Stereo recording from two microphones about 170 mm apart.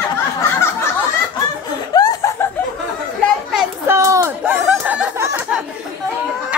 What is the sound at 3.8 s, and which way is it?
Speech, 15° right (ahead or behind).